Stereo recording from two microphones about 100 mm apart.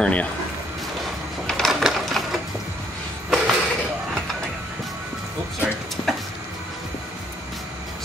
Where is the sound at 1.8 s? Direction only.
Centre (ahead or behind).